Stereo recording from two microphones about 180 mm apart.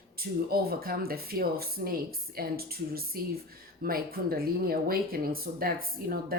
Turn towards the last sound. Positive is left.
turn(degrees=-55)  # may be behind; listen again after turning